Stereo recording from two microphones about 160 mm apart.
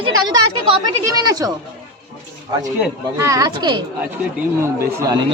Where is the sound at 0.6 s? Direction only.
30° right (ahead or behind).